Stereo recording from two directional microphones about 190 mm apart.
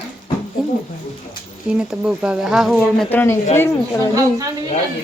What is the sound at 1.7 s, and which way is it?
Speech, 5° right (ahead or behind).